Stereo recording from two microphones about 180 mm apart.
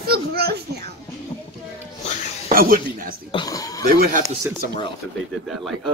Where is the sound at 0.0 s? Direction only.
60° right (ahead or behind).